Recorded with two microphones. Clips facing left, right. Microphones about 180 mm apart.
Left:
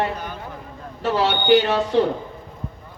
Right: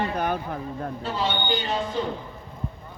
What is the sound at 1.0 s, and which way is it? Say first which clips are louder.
A man's voice: left 8 dB; 75° left (ahead or behind).